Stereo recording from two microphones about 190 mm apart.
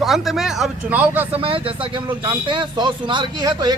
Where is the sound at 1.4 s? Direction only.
30° right (ahead or behind).